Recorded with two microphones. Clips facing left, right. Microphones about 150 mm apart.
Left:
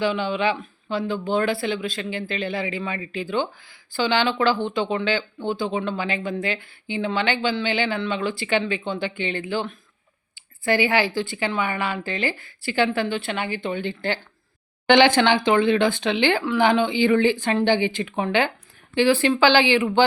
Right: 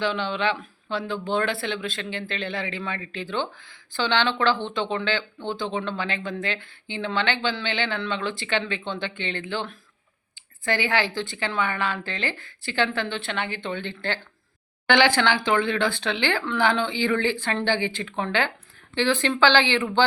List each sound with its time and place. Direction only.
0.0 s speech: 10° left (ahead or behind)